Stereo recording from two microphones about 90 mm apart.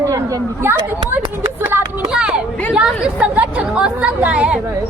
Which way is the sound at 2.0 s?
10° right (ahead or behind).